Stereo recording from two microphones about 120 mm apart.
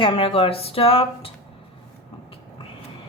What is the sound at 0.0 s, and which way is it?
A woman's voice, 50° left (ahead or behind).